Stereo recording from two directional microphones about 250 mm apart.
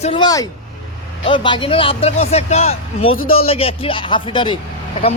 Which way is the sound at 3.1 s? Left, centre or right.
Left.